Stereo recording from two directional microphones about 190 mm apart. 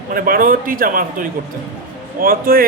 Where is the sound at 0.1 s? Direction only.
50° right (ahead or behind).